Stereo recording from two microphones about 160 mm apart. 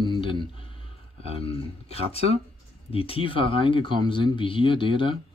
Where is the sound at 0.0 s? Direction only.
30° left (ahead or behind).